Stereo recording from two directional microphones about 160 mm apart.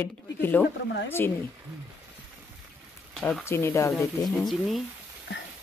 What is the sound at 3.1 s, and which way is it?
Speech, 5° left (ahead or behind).